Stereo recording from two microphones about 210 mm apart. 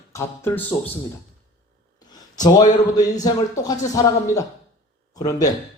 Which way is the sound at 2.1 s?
20° left (ahead or behind).